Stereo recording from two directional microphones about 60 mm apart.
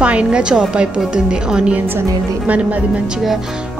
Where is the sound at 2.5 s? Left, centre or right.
Right.